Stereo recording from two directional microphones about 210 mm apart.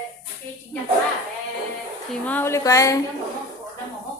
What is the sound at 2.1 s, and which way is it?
Speech, 10° left (ahead or behind).